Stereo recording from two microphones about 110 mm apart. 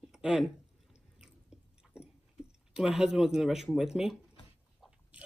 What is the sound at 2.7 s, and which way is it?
Speech, 5° right (ahead or behind).